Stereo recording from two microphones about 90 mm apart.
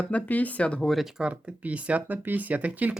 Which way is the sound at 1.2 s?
15° right (ahead or behind).